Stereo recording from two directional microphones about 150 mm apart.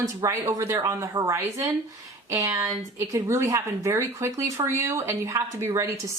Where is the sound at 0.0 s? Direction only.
20° right (ahead or behind).